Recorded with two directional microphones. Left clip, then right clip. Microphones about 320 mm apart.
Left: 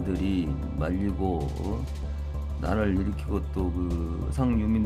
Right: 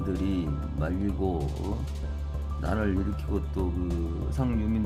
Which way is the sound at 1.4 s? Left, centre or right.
Centre.